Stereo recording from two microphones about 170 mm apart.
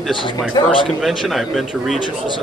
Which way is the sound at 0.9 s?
Centre (ahead or behind).